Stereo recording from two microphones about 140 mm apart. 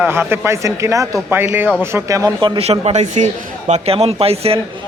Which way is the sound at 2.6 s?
50° right (ahead or behind).